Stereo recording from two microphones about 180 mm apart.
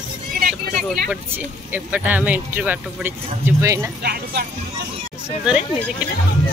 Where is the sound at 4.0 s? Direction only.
65° right (ahead or behind).